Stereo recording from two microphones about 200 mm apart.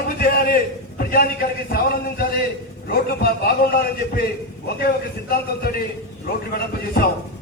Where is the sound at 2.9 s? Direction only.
50° left (ahead or behind).